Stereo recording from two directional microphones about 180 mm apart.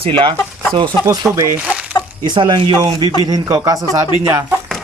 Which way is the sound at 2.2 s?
25° right (ahead or behind).